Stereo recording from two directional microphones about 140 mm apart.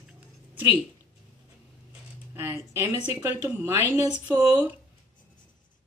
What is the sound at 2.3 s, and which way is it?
Speech, 20° right (ahead or behind).